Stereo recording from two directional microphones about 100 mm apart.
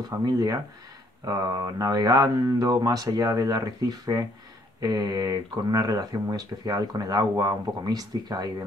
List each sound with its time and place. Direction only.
0.2 s speech: 45° right (ahead or behind)